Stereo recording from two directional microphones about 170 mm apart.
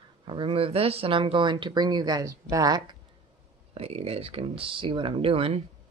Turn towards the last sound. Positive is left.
turn(degrees=-35)  # may be behind; listen again after turning